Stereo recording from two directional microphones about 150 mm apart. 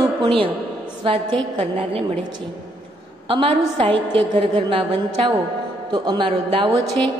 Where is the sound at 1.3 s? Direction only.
35° right (ahead or behind).